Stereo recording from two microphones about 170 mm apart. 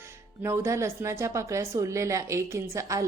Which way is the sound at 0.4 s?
15° right (ahead or behind).